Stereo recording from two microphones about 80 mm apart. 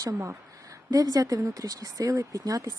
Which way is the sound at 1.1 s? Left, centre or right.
Right.